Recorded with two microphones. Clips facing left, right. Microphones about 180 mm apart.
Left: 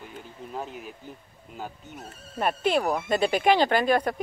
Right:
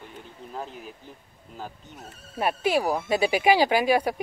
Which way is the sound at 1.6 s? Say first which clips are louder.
Left 1 dB; centre (ahead or behind).